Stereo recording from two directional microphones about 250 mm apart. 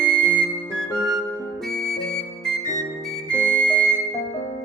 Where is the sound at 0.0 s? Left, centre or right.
Centre.